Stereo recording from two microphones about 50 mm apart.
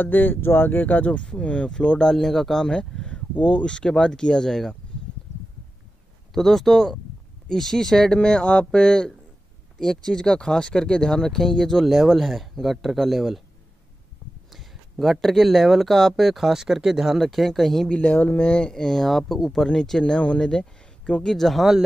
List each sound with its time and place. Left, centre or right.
0.0 s speech: left
1.7 s speech: centre
6.3 s speech: centre
14.5 s speech: centre
17.8 s speech: left
18.5 s speech: centre
21.4 s speech: centre